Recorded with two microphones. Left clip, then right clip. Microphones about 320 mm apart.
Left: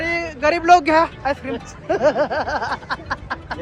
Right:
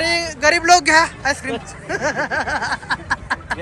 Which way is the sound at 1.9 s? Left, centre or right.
Centre.